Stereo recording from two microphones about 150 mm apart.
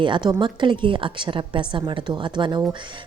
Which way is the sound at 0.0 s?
30° right (ahead or behind).